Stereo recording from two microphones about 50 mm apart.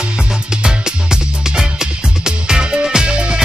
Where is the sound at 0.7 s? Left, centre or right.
Centre.